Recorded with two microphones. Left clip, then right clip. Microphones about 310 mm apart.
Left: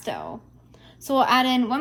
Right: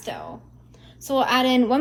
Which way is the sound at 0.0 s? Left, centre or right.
Left.